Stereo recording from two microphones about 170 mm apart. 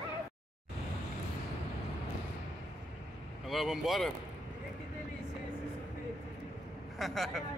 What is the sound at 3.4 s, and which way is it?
Speech, centre (ahead or behind).